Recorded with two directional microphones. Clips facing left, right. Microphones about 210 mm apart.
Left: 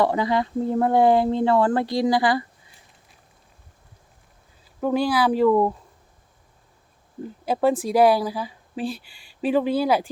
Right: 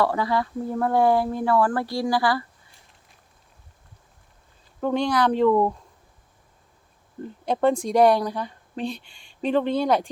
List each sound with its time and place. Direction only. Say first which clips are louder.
0.0 s speech: left 2 dB; 20° left (ahead or behind)
4.8 s speech: left 1 dB; 5° left (ahead or behind)
7.2 s speech: even; 5° left (ahead or behind)